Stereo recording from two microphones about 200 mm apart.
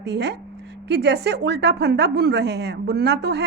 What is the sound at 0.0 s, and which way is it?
A woman's voice, 60° right (ahead or behind).